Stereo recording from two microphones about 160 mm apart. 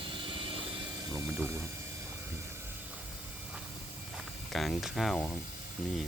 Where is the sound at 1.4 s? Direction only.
15° right (ahead or behind).